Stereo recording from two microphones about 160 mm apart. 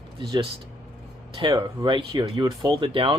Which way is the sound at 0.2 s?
30° right (ahead or behind).